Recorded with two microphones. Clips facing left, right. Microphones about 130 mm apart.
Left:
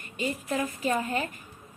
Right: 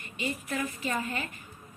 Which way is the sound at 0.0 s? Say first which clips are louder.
Left 3 dB; 45° left (ahead or behind).